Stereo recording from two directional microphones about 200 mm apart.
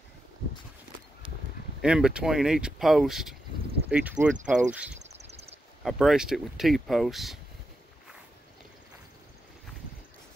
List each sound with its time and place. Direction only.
1.8 s speech: 5° right (ahead or behind)
5.0 s a sound: 35° right (ahead or behind)
5.9 s speech: centre (ahead or behind)